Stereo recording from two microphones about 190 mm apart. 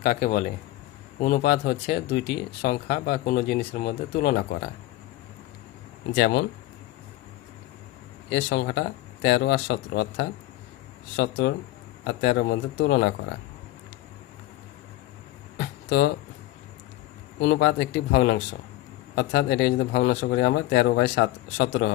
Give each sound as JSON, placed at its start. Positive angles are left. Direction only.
{"t": 0.0, "sound": "speech", "side_deg": 45}
{"t": 6.1, "sound": "speech", "side_deg": 65}
{"t": 8.3, "sound": "speech", "side_deg": 65}
{"t": 15.5, "sound": "a sound", "side_deg": 65}
{"t": 17.4, "sound": "speech", "side_deg": 60}